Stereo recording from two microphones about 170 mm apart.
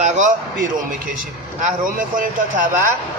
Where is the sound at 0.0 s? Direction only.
45° right (ahead or behind).